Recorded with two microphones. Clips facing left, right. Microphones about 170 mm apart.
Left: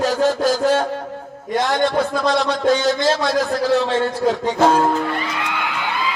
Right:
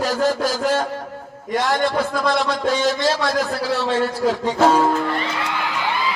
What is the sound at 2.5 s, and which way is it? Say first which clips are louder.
Music: left 3 dB; 10° right (ahead or behind).